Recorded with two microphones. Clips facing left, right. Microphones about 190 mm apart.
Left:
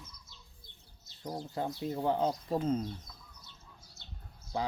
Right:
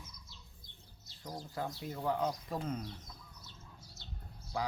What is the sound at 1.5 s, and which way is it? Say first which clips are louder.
Speech: left 5 dB; 25° left (ahead or behind).